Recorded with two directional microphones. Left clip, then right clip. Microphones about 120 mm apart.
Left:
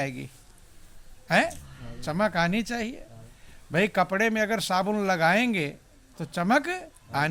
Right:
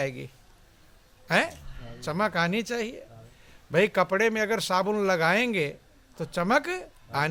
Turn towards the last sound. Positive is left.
turn(degrees=-40)  # may be behind; listen again after turning